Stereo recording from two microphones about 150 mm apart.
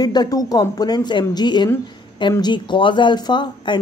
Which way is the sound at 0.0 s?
25° left (ahead or behind).